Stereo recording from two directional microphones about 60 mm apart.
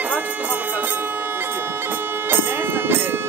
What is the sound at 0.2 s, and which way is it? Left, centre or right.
Bagpipes, right.